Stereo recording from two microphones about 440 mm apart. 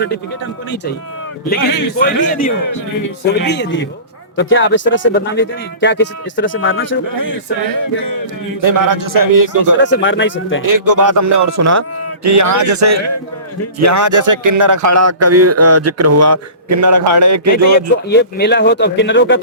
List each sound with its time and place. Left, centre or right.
1.5 s a man's voice: left
2.0 s speech: centre
8.6 s a man's voice: right
9.8 s speech: left
10.6 s speech: right
18.1 s speech: left